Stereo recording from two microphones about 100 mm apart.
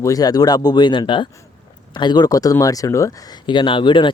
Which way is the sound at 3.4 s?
55° left (ahead or behind).